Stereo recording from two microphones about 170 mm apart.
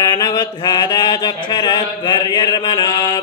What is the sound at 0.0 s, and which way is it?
Mantra, 25° left (ahead or behind).